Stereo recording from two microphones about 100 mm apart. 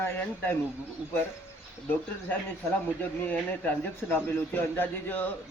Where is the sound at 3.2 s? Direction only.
15° left (ahead or behind).